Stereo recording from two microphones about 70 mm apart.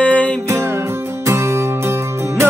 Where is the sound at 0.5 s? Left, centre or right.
Right.